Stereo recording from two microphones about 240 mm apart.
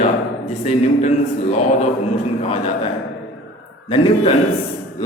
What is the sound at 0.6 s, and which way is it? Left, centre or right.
A man's voice, left.